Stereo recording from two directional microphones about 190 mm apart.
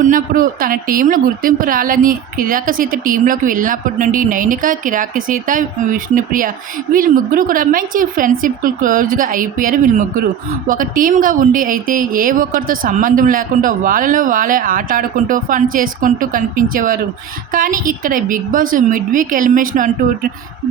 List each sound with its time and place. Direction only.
0.0 s a woman's voice: 45° right (ahead or behind)